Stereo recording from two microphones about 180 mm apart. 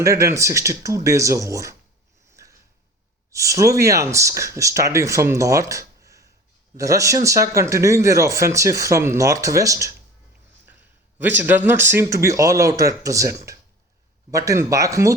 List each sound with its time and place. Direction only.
0.0 s speech: 15° right (ahead or behind)
2.3 s a sound: 15° right (ahead or behind)
3.3 s speech: 15° right (ahead or behind)
11.3 s speech: 10° right (ahead or behind)